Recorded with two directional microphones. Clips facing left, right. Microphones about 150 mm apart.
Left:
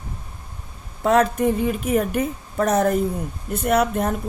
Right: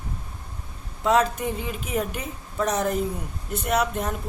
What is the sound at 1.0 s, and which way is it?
A woman's voice, 55° left (ahead or behind).